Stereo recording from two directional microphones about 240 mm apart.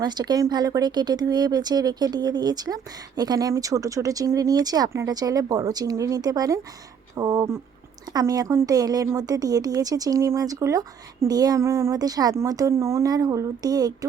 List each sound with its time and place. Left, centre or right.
0.0 s speech: centre